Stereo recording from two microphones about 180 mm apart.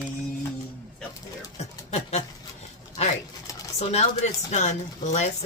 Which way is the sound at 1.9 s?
35° left (ahead or behind).